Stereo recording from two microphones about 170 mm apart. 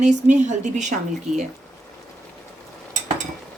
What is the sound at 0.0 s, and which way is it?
Speech, 45° right (ahead or behind).